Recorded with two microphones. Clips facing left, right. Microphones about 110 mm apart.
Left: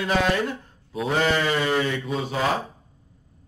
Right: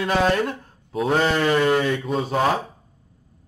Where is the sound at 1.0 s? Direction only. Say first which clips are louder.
Right 3 dB; 45° right (ahead or behind).